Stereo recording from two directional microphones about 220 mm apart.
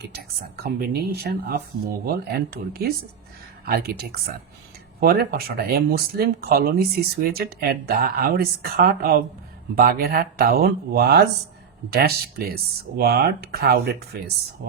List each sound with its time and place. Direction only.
0.0 s speech: 45° right (ahead or behind)